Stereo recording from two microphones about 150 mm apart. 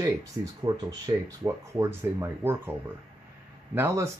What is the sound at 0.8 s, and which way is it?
Speech, 25° right (ahead or behind).